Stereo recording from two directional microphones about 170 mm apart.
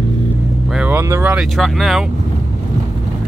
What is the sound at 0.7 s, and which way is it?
Speech, 10° right (ahead or behind).